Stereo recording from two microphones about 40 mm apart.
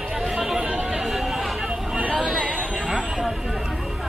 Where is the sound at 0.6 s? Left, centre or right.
Centre.